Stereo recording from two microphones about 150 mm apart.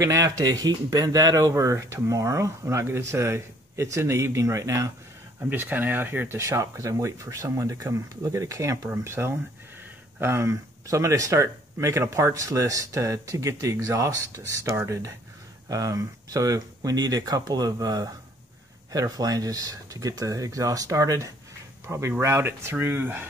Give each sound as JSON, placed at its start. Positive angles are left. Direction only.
{"t": 0.0, "sound": "speech", "side_deg": -20}